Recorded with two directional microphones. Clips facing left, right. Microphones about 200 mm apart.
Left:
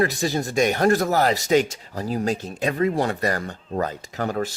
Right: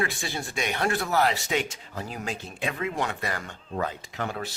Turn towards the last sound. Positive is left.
turn(degrees=45)  # may be behind; listen again after turning